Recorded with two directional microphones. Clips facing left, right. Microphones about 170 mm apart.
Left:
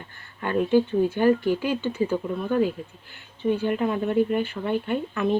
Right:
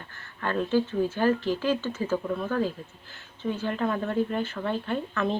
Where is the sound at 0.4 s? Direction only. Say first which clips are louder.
Left 4 dB; 15° left (ahead or behind).